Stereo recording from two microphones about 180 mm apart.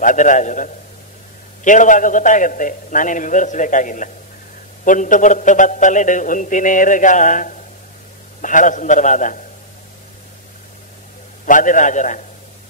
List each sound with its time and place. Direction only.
0.0 s a man's voice: 45° left (ahead or behind)
11.4 s a man's voice: 45° left (ahead or behind)